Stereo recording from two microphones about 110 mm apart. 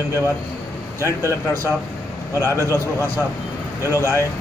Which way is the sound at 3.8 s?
25° left (ahead or behind).